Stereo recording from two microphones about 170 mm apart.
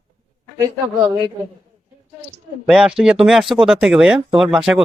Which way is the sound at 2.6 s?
5° right (ahead or behind).